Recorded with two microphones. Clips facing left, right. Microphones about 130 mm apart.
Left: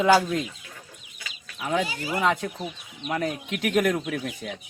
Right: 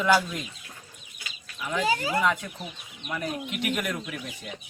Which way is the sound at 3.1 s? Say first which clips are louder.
Left 3 dB; 90° left.